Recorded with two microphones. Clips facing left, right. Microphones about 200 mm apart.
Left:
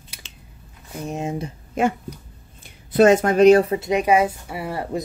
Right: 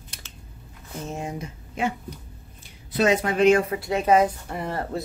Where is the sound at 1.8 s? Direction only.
45° left (ahead or behind).